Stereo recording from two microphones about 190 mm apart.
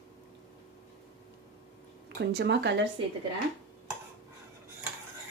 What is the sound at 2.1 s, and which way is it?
Speech, 60° right (ahead or behind).